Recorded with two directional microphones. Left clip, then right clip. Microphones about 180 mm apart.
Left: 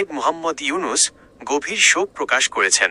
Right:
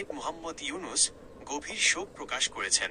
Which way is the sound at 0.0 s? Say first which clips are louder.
Left 16 dB; 45° left (ahead or behind).